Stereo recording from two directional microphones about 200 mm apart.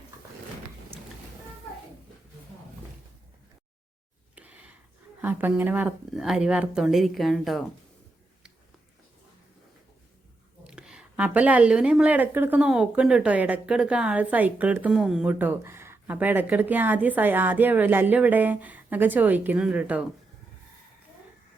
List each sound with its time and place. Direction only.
4.4 s a sound: 5° right (ahead or behind)
5.2 s speech: 10° right (ahead or behind)
10.6 s a woman's voice: 5° right (ahead or behind)